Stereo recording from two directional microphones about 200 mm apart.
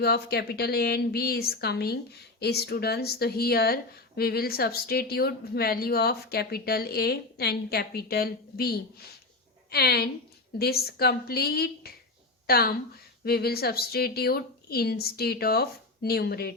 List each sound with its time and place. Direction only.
0.0 s a woman's voice: 55° left (ahead or behind)